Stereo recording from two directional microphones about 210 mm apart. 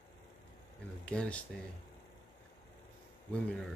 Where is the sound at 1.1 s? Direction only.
5° left (ahead or behind).